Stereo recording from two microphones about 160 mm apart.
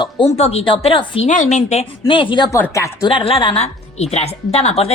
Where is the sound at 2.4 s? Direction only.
15° left (ahead or behind).